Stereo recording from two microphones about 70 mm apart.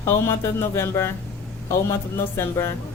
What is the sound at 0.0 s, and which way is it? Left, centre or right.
A man's voice, left.